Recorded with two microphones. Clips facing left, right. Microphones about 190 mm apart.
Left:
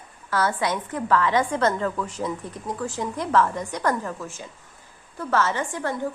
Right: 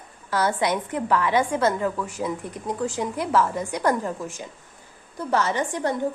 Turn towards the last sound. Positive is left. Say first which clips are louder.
# right 3 dB
turn(degrees=-20)  # may be behind; listen again after turning